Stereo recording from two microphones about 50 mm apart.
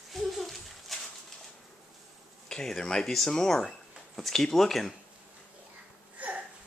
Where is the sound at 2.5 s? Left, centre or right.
Centre.